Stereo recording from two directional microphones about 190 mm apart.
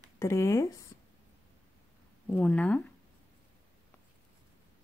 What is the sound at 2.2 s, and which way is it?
Speech, 5° left (ahead or behind).